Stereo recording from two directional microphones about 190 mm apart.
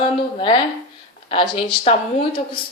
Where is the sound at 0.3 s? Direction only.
25° left (ahead or behind).